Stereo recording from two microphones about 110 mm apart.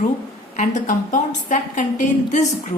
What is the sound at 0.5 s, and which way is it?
Speech, 90° left.